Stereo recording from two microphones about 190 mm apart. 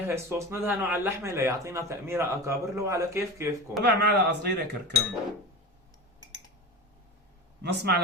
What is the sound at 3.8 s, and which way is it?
Speech, 60° right (ahead or behind).